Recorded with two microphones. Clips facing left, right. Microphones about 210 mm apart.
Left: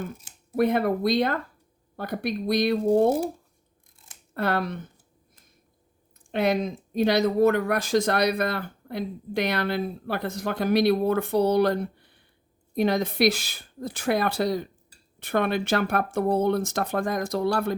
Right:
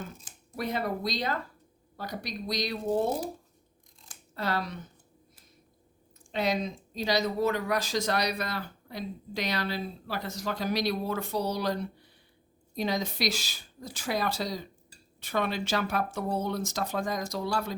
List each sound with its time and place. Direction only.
0.5 s speech: 55° left (ahead or behind)
4.4 s speech: 55° left (ahead or behind)
6.3 s speech: 55° left (ahead or behind)